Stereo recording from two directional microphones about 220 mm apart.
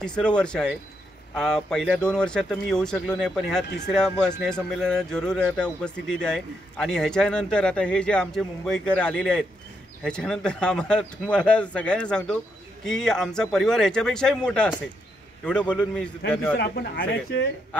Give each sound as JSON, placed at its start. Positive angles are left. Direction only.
{"t": 0.0, "sound": "speech", "side_deg": 5}
{"t": 16.5, "sound": "speech", "side_deg": 45}